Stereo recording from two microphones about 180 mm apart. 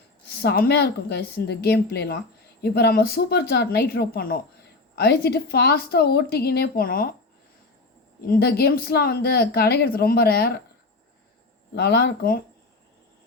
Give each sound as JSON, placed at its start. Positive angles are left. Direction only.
{"t": 0.4, "sound": "speech", "side_deg": 60}
{"t": 8.3, "sound": "speech", "side_deg": 60}
{"t": 11.7, "sound": "speech", "side_deg": 65}